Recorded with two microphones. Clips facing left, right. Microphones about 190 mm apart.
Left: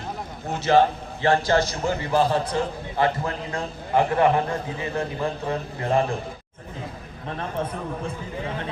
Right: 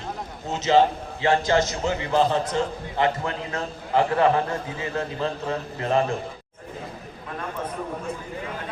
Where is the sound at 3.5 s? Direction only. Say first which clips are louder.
Left 1 dB; 15° left (ahead or behind).